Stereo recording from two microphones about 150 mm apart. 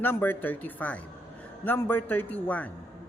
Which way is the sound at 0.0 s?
15° left (ahead or behind).